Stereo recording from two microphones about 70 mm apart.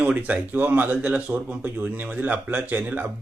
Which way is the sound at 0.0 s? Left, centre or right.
Right.